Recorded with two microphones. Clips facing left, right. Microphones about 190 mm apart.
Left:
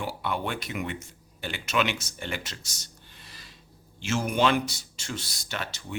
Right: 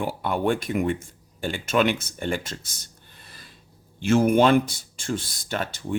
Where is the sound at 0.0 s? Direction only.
45° right (ahead or behind).